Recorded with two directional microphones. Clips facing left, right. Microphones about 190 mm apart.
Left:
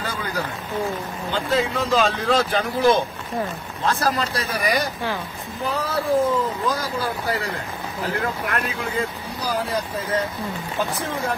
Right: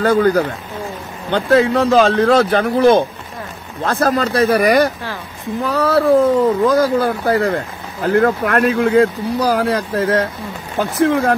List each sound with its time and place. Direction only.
0.0 s speech: 55° right (ahead or behind)
1.3 s speech: 70° right (ahead or behind)
5.7 s speech: 75° right (ahead or behind); by 11.3 s 90° right